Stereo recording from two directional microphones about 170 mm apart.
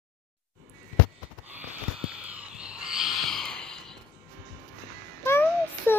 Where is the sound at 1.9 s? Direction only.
5° right (ahead or behind).